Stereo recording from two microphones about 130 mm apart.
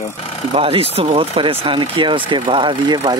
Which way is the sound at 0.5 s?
45° right (ahead or behind).